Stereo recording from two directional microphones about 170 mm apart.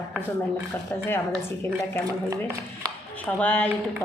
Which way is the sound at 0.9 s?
15° left (ahead or behind).